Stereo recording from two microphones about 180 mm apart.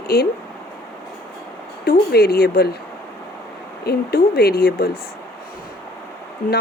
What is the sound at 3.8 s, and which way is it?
Speech, 60° left (ahead or behind).